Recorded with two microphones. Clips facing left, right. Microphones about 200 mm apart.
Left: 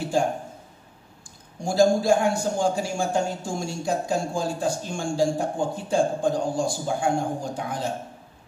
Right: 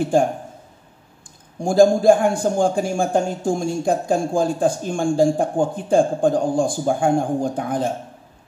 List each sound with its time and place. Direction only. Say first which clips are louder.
0.1 s a man's voice: right 5 dB; 55° right (ahead or behind)
1.6 s a man's voice: right 5 dB; 55° right (ahead or behind)